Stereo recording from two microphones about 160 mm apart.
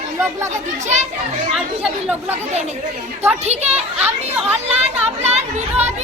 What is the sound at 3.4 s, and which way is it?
Speech, 45° right (ahead or behind).